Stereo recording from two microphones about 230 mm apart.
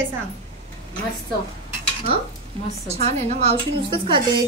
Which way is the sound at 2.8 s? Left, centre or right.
Right.